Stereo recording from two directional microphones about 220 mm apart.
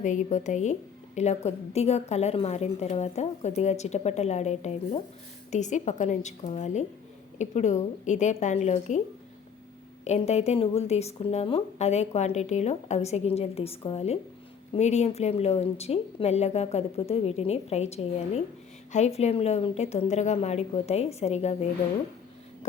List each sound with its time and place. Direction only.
0.0 s a woman's voice: 35° left (ahead or behind)
10.0 s speech: 30° left (ahead or behind)